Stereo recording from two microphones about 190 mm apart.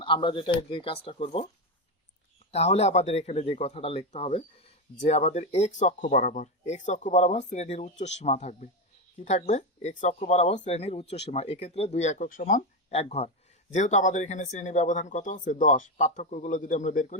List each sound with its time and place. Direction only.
0.0 s speech: 25° left (ahead or behind)
2.5 s speech: 35° left (ahead or behind)